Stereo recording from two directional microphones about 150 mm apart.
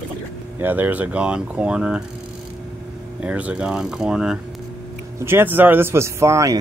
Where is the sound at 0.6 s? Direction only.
10° right (ahead or behind).